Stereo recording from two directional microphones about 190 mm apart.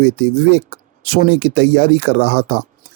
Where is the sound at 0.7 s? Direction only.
55° right (ahead or behind).